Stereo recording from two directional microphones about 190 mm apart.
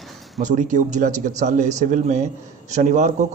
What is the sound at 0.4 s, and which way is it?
A man's voice, 40° right (ahead or behind).